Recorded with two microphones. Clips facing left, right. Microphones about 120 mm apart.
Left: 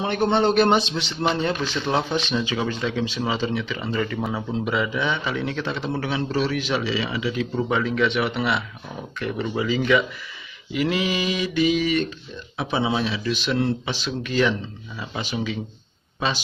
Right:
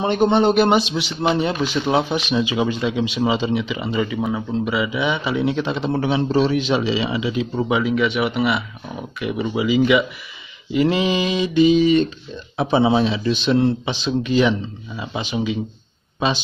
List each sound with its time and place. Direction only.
0.0 s a man's voice: 20° right (ahead or behind)
4.2 s a man's voice: centre (ahead or behind)
10.7 s speech: 25° right (ahead or behind)